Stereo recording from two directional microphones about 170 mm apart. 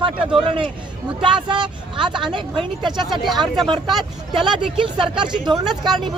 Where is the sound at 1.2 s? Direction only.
30° right (ahead or behind).